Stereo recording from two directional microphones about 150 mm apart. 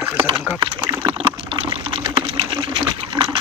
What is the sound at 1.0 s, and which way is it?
Water, 40° right (ahead or behind).